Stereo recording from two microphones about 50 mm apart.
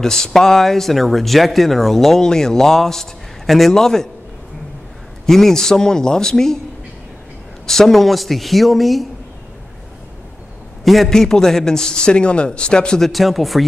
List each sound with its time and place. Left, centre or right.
0.0 s speech: centre
5.2 s speech: centre
7.6 s speech: centre
10.8 s a man's voice: centre
11.1 s speech: centre
13.0 s speech: centre